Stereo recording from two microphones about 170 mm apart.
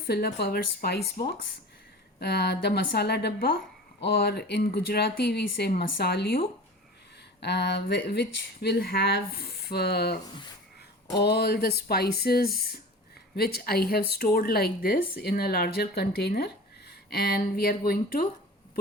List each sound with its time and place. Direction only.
0.0 s a woman's voice: 65° left (ahead or behind)
7.4 s speech: 75° left (ahead or behind)
11.2 s a woman's voice: 70° left (ahead or behind)